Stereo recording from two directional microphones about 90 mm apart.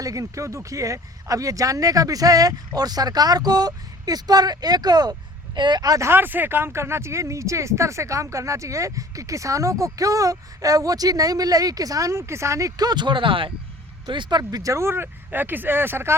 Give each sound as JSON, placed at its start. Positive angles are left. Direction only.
{"t": 0.0, "sound": "speech", "side_deg": -40}
{"t": 6.1, "sound": "speech", "side_deg": -25}
{"t": 14.1, "sound": "speech", "side_deg": -60}
{"t": 14.6, "sound": "speech", "side_deg": -35}